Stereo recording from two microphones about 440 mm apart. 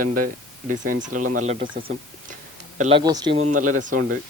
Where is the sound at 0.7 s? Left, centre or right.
Centre.